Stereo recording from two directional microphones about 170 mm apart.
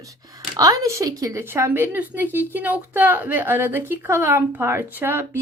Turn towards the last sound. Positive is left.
turn(degrees=-15)  # may be behind; listen again after turning